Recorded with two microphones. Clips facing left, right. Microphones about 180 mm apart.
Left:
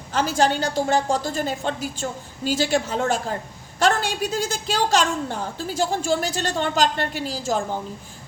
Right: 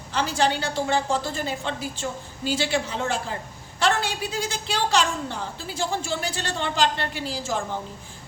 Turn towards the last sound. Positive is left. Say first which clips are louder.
# left 3 dB
turn(degrees=40)  # may be behind; listen again after turning